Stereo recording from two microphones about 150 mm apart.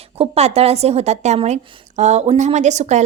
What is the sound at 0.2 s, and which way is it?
A woman's voice, 45° right (ahead or behind).